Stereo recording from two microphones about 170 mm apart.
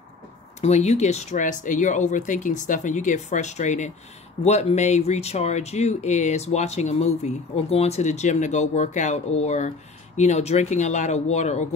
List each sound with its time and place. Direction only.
0.6 s speech: 40° left (ahead or behind)